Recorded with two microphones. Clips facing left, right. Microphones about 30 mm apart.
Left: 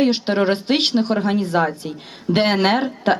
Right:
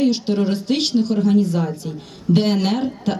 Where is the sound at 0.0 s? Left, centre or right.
Left.